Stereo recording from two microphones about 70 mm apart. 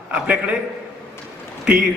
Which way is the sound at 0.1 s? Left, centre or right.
Centre.